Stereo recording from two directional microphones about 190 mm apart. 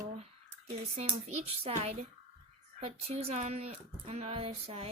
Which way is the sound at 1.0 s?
35° right (ahead or behind).